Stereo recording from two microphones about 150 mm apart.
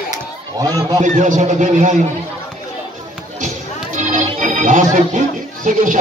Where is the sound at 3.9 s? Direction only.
55° right (ahead or behind).